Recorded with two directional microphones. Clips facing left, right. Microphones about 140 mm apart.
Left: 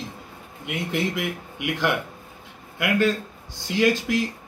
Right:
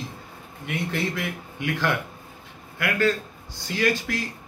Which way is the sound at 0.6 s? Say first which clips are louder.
Left 1 dB; 15° left (ahead or behind).